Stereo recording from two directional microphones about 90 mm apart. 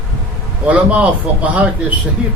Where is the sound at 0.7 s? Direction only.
15° right (ahead or behind).